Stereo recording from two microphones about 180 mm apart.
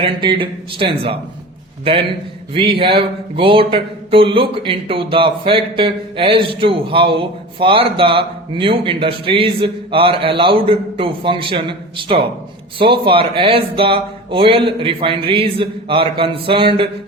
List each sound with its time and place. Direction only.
0.0 s speech: 25° right (ahead or behind)
2.5 s speech: 30° right (ahead or behind)